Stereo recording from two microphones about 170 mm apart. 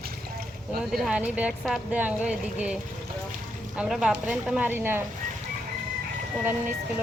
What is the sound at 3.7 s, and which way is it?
Speech, 5° right (ahead or behind).